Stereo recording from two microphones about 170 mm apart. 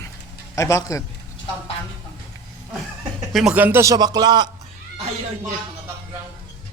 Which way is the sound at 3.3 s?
5° right (ahead or behind).